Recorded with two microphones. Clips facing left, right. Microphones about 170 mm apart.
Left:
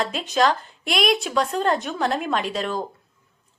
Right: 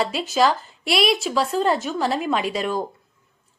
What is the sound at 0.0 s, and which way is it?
A woman's voice, 5° right (ahead or behind).